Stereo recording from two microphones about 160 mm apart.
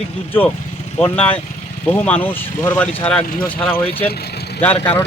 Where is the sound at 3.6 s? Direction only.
35° left (ahead or behind).